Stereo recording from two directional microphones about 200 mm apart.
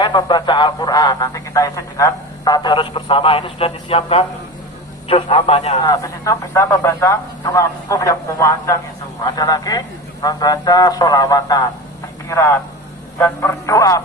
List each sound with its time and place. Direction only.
0.0 s a man's voice: 20° left (ahead or behind)
5.8 s a man's voice: 20° left (ahead or behind)